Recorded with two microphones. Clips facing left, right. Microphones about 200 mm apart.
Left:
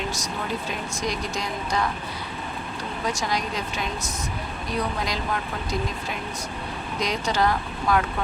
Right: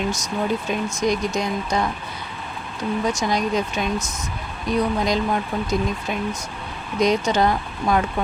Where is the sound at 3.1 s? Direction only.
20° right (ahead or behind).